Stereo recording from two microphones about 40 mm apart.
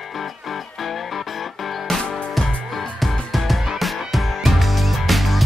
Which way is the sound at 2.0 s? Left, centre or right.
Left.